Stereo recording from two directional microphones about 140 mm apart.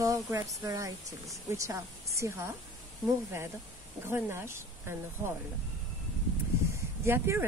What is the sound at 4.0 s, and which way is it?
Speech, 15° right (ahead or behind).